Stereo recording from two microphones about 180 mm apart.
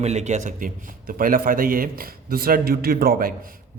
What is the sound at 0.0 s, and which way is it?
A man's voice, 40° right (ahead or behind).